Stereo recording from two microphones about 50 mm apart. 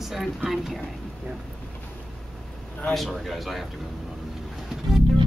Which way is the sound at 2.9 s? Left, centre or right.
Centre.